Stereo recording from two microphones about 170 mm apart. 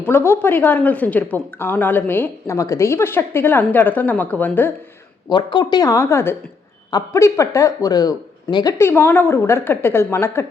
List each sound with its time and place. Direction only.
0.0 s a woman's voice: 15° left (ahead or behind)
5.3 s speech: 25° left (ahead or behind)
8.8 s a woman's voice: 15° left (ahead or behind)